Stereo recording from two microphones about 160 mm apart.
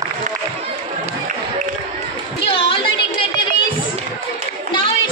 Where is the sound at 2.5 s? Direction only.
35° left (ahead or behind).